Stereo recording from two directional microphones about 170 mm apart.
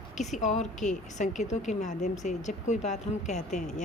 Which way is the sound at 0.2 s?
45° left (ahead or behind).